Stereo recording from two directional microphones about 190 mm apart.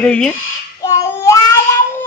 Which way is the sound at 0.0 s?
5° left (ahead or behind).